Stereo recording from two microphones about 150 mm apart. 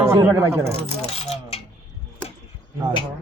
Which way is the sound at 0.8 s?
45° left (ahead or behind).